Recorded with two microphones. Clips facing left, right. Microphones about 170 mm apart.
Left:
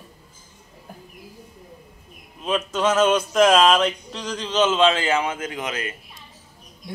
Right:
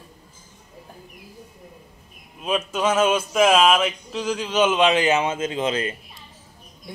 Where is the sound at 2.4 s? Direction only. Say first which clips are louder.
Left 1 dB; 10° right (ahead or behind); by 5.9 s 30° right (ahead or behind).